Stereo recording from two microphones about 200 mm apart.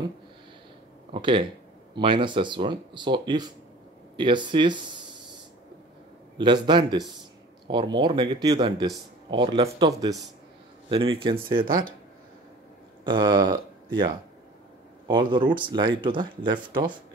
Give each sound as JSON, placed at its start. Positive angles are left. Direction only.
{"t": 1.1, "sound": "speech", "side_deg": -25}
{"t": 6.3, "sound": "speech", "side_deg": -25}
{"t": 11.6, "sound": "speech", "side_deg": -45}
{"t": 13.0, "sound": "speech", "side_deg": -20}